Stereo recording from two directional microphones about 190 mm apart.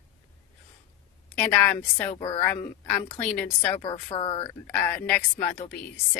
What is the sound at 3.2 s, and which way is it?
Speech, 5° left (ahead or behind).